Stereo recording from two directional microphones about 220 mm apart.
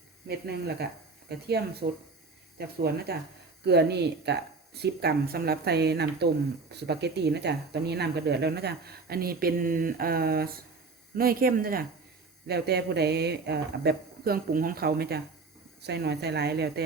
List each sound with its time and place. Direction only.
0.3 s speech: 45° right (ahead or behind)